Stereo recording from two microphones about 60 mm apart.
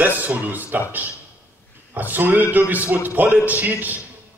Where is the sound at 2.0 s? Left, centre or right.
Right.